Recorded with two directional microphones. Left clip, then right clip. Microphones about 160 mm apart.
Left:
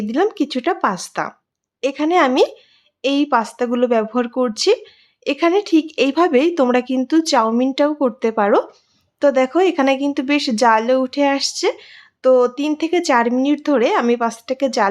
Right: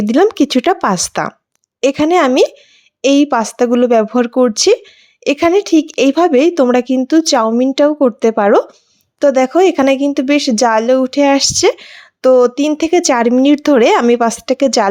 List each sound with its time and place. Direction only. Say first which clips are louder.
0.0 s speech: right 7 dB; 45° right (ahead or behind)